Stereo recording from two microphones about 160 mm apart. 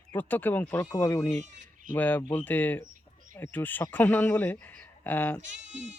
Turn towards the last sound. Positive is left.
turn(degrees=-50)  # may be behind; listen again after turning